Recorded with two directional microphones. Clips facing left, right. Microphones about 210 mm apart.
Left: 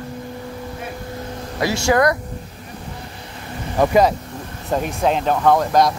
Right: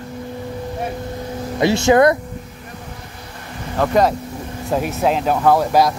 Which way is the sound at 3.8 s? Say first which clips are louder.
Left 1 dB; 5° left (ahead or behind).